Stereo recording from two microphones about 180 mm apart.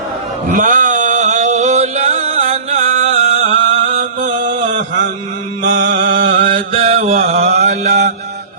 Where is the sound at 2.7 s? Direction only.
40° right (ahead or behind).